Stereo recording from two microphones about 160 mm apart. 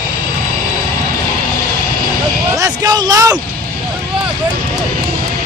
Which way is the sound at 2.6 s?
25° right (ahead or behind).